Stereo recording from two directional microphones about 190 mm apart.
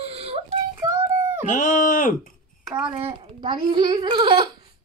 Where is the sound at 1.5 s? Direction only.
45° left (ahead or behind).